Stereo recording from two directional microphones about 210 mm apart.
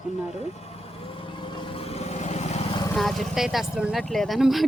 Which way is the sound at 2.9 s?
Centre (ahead or behind).